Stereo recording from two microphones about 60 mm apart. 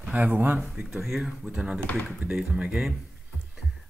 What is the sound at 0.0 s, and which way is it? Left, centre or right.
Speech, right.